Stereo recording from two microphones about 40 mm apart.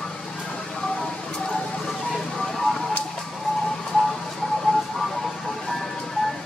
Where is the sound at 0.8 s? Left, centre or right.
Centre.